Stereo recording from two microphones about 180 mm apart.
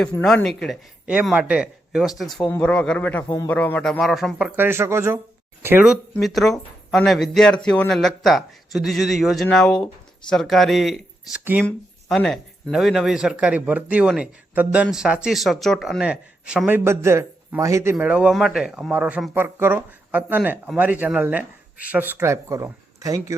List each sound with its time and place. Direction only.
0.2 s a man's voice: 5° left (ahead or behind); by 3.5 s 20° left (ahead or behind)
3.5 s speech: 5° left (ahead or behind); by 17.9 s 15° right (ahead or behind)
17.9 s speech: 5° right (ahead or behind)